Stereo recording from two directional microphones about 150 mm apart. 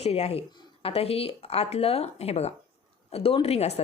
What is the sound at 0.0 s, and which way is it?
A woman's voice, 45° left (ahead or behind).